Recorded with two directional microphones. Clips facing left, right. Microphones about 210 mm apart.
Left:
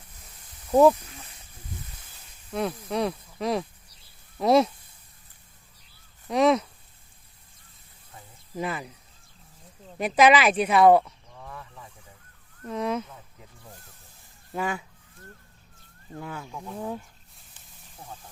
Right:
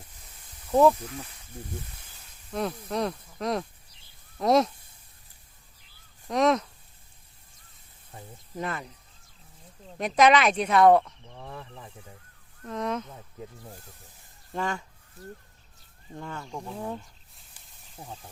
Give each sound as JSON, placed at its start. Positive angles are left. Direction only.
{"t": 2.5, "sound": "speech", "side_deg": 0}
{"t": 6.2, "sound": "speech", "side_deg": 0}
{"t": 8.5, "sound": "speech", "side_deg": 5}
{"t": 11.3, "sound": "speech", "side_deg": -30}
{"t": 12.6, "sound": "speech", "side_deg": 5}
{"t": 14.5, "sound": "speech", "side_deg": 5}
{"t": 16.1, "sound": "speech", "side_deg": 5}